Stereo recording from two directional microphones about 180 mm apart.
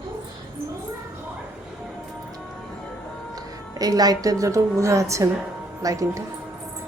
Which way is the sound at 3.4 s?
20° right (ahead or behind).